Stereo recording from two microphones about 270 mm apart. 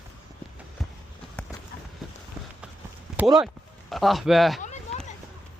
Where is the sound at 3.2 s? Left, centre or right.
Centre.